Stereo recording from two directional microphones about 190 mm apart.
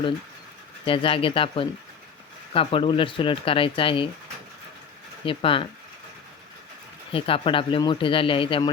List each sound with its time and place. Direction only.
0.9 s speech: 30° left (ahead or behind)
5.2 s speech: 25° left (ahead or behind)
7.1 s speech: 30° left (ahead or behind)